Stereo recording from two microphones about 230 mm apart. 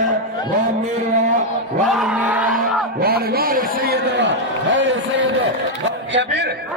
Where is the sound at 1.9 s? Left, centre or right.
Centre.